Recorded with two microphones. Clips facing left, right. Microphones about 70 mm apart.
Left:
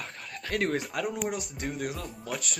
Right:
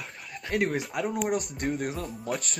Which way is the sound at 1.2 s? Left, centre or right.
Right.